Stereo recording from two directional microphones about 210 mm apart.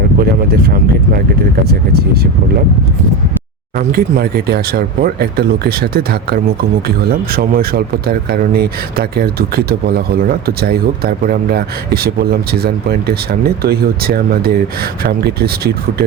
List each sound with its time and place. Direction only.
0.2 s speech: 45° right (ahead or behind)
3.8 s speech: 45° right (ahead or behind)